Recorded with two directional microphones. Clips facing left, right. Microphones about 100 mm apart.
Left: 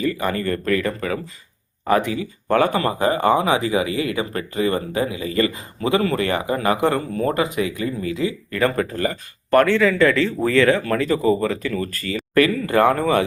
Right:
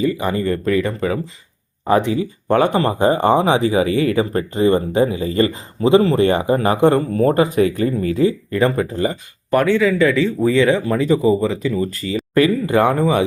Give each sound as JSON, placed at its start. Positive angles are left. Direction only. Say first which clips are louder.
{"t": 0.0, "sound": "speech", "louder": "right 3 dB", "side_deg": -20}
{"t": 8.4, "sound": "speech", "louder": "right 3 dB", "side_deg": -25}